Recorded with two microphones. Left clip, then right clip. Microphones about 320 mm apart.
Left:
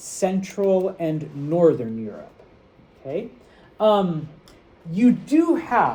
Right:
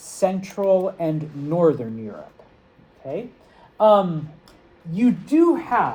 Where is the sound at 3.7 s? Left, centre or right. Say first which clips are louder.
Right 3 dB; centre.